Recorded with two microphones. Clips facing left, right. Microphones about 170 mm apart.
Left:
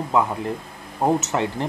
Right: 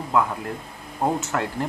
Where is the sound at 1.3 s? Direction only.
20° left (ahead or behind).